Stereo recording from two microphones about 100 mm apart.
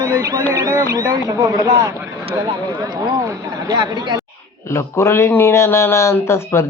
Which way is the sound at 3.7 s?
40° right (ahead or behind).